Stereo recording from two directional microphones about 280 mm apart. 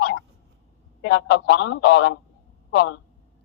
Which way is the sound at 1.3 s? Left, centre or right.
Left.